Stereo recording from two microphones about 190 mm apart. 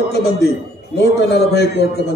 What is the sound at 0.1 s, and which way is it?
Speech, 60° left (ahead or behind).